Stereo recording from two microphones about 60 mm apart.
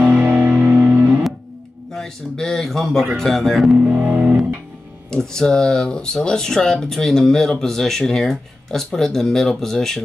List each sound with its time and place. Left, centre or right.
0.3 s music: right
1.9 s speech: centre
3.7 s speech: right
5.1 s speech: centre